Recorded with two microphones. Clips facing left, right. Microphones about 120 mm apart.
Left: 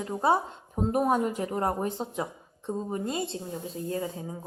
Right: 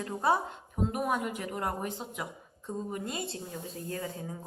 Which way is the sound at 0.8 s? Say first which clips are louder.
Left 6 dB; 35° left (ahead or behind).